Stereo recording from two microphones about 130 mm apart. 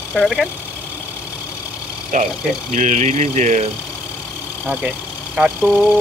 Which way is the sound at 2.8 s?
65° right (ahead or behind).